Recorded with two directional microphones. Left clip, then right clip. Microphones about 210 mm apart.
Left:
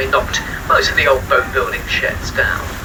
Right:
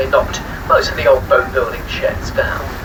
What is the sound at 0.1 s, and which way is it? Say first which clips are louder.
Speech: right 1 dB; 45° right (ahead or behind).